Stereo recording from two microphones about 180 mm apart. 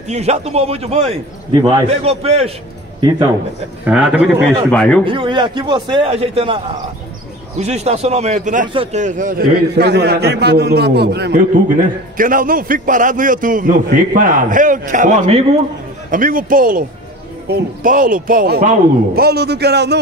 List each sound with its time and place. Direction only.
0.1 s a man's voice: 35° right (ahead or behind)
1.5 s a man's voice: 25° right (ahead or behind)
1.9 s a man's voice: 35° right (ahead or behind)
3.0 s a man's voice: 25° right (ahead or behind)
3.8 s a man's voice: 5° right (ahead or behind)
4.6 s a man's voice: 5° left (ahead or behind)
5.0 s a man's voice: 30° right (ahead or behind); by 19.2 s 50° right (ahead or behind)
19.2 s speech: 65° right (ahead or behind)